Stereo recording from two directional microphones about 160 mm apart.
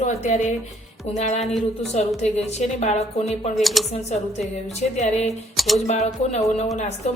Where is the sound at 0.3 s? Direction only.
50° left (ahead or behind).